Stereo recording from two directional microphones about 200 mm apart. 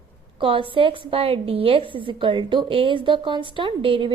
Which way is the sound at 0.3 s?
25° right (ahead or behind).